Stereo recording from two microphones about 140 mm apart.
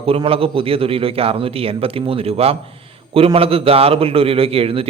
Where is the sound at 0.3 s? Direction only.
40° right (ahead or behind).